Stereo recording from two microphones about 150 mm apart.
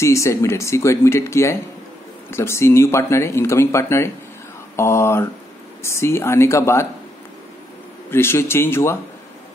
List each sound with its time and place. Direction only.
0.0 s speech: 20° left (ahead or behind)
8.1 s speech: 15° left (ahead or behind)